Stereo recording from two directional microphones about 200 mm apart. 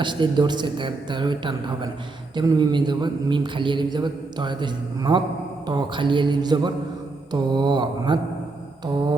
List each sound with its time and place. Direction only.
0.0 s mantra: 25° right (ahead or behind)